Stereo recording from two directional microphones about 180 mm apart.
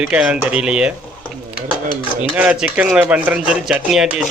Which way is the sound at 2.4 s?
5° right (ahead or behind).